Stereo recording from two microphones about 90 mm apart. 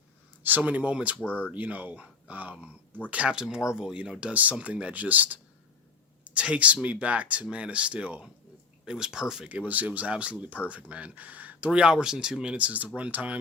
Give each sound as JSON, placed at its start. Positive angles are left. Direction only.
{"t": 0.4, "sound": "speech", "side_deg": -20}
{"t": 1.2, "sound": "speech", "side_deg": 20}
{"t": 1.5, "sound": "speech", "side_deg": -20}